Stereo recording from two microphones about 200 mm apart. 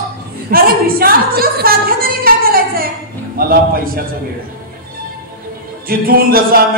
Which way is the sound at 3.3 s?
45° right (ahead or behind).